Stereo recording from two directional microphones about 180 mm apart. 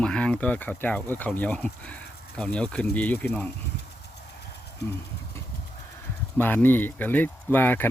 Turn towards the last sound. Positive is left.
turn(degrees=10)  # may be behind; listen again after turning